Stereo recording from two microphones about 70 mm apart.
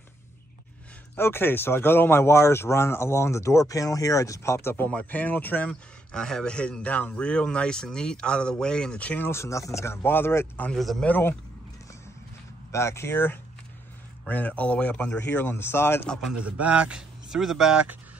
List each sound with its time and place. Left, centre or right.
1.1 s speech: left
5.7 s a man's voice: centre
9.3 s speech: left
10.0 s speech: left
10.7 s speech: centre
11.1 s speech: left
12.7 s speech: left
16.3 s speech: centre